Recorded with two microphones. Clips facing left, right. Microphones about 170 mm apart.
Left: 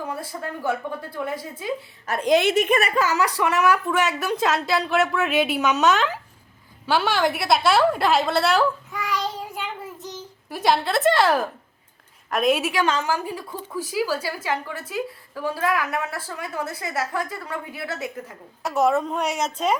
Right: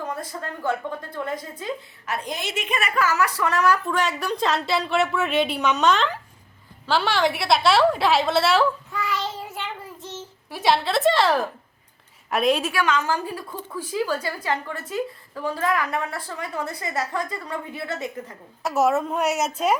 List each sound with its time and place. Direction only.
0.1 s a woman's voice: 10° left (ahead or behind)
2.2 s a woman's voice: 90° left
2.5 s a woman's voice: 50° left (ahead or behind)
2.9 s a woman's voice: 25° left (ahead or behind); by 9.0 s centre (ahead or behind)
10.5 s a woman's voice: centre (ahead or behind)
12.7 s a woman's voice: 25° left (ahead or behind)
13.1 s a woman's voice: 10° left (ahead or behind); by 19.7 s 5° right (ahead or behind)